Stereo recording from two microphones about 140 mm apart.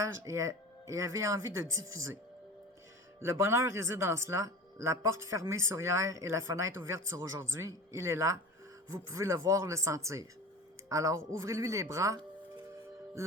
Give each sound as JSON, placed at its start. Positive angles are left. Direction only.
{"t": 0.0, "sound": "speech", "side_deg": -20}
{"t": 3.2, "sound": "speech", "side_deg": -20}